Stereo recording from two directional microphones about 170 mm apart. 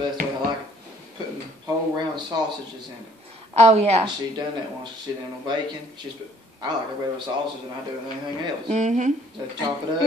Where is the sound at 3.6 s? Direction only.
40° right (ahead or behind).